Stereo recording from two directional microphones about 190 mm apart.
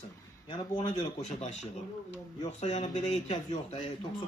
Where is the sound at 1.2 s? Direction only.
35° left (ahead or behind).